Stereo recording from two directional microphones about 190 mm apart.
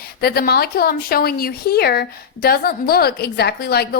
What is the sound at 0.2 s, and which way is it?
A woman's voice, 55° left (ahead or behind).